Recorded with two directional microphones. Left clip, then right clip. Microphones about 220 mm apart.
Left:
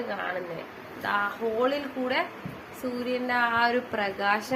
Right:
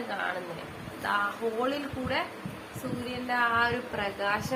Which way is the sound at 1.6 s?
15° left (ahead or behind).